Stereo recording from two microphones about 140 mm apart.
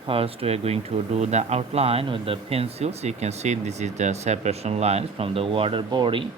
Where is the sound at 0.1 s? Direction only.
45° right (ahead or behind).